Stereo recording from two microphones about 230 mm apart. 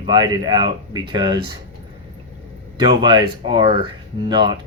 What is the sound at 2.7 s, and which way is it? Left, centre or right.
Speech, centre.